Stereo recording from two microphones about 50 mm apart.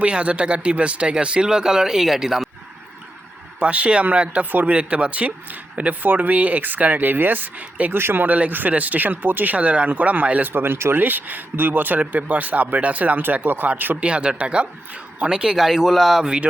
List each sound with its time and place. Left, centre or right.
0.0 s speech: right; by 2.5 s centre
3.6 s speech: right
7.9 s speech: right
10.5 s speech: right
10.9 s speech: right
14.0 s speech: right